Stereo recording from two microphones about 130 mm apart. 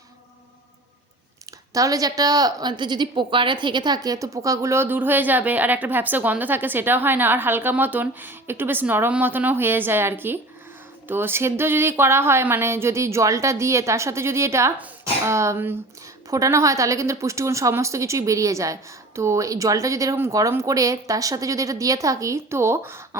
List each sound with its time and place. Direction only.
1.7 s a woman's voice: 25° right (ahead or behind)